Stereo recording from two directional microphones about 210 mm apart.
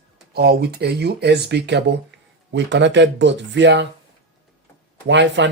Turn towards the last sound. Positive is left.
turn(degrees=-55)  # may be behind; listen again after turning